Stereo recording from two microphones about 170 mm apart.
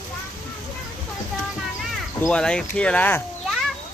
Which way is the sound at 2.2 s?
5° left (ahead or behind).